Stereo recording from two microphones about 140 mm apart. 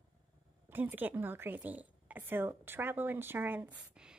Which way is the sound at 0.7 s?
15° right (ahead or behind).